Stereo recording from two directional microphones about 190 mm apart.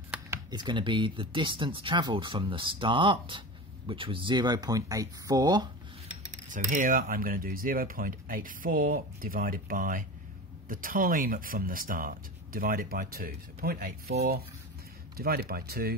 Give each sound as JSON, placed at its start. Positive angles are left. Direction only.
{"t": 0.1, "sound": "speech", "side_deg": -20}
{"t": 6.3, "sound": "speech", "side_deg": -40}
{"t": 15.1, "sound": "speech", "side_deg": -55}